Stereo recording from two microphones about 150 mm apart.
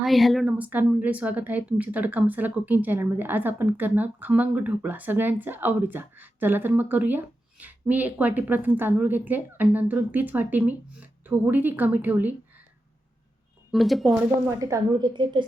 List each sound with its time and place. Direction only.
0.0 s a woman's voice: centre (ahead or behind)
13.7 s speech: centre (ahead or behind)
14.4 s a woman's voice: 20° right (ahead or behind)